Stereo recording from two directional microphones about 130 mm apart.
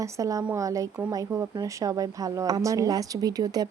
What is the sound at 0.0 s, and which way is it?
A woman's voice, 25° right (ahead or behind).